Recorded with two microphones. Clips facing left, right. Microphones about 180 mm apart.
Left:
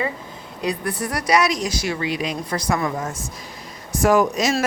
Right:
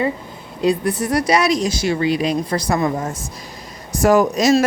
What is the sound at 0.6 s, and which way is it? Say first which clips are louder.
A woman's voice: right 7 dB; 25° right (ahead or behind).